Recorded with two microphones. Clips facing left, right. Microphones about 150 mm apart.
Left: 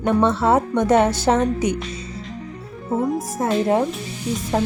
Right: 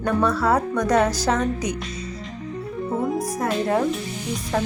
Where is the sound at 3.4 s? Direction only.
20° left (ahead or behind).